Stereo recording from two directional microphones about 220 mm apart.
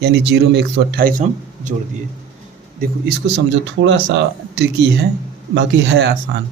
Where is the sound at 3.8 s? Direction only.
55° right (ahead or behind).